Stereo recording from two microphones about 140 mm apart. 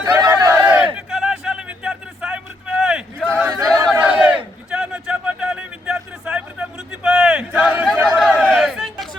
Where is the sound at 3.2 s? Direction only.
10° right (ahead or behind).